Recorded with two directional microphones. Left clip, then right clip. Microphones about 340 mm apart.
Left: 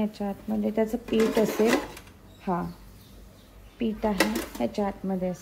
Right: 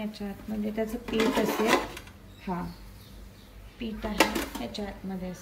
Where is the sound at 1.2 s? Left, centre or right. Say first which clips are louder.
Left 3 dB; centre.